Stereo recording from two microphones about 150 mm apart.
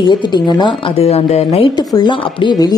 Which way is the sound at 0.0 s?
30° left (ahead or behind).